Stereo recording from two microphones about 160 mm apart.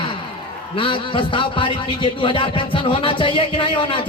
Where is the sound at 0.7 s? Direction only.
30° left (ahead or behind).